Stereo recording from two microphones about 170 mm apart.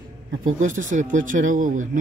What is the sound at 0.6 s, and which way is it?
Speech, 50° right (ahead or behind).